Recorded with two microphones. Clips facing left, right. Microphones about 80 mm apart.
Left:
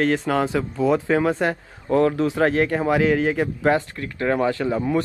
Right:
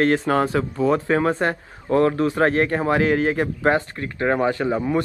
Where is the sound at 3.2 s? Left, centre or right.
Centre.